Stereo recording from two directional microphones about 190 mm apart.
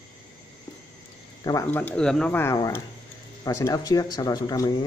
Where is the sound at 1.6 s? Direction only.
10° left (ahead or behind).